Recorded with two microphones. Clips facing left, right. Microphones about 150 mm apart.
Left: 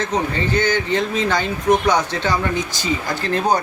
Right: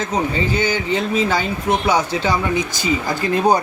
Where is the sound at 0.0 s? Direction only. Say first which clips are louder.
Right 1 dB; 10° right (ahead or behind).